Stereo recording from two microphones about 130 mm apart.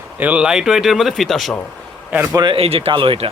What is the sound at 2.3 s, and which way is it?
Speech, 40° right (ahead or behind).